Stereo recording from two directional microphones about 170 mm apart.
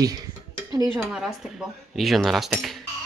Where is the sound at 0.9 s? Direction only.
5° right (ahead or behind).